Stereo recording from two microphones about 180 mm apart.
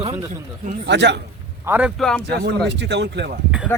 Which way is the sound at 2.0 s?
5° left (ahead or behind).